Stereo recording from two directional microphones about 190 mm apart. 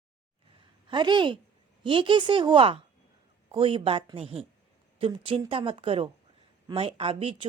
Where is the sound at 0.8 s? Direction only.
25° right (ahead or behind).